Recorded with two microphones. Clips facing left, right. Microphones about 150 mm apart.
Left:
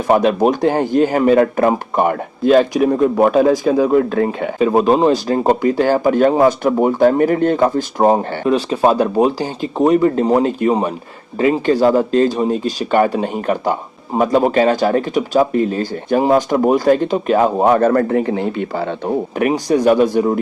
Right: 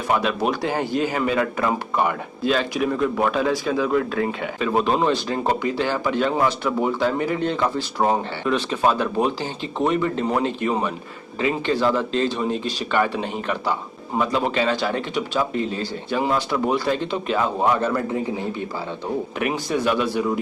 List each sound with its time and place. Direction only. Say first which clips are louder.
0.1 s speech: left 9 dB; 45° left (ahead or behind)
17.7 s speech: left 9 dB; 55° left (ahead or behind)
18.2 s speech: left 7 dB; 80° left
19.4 s speech: left 9 dB; 40° left (ahead or behind)